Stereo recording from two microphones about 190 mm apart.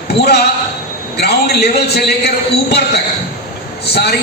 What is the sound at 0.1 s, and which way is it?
A man's voice, 60° left (ahead or behind).